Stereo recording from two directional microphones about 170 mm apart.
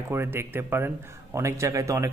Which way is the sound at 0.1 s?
15° right (ahead or behind).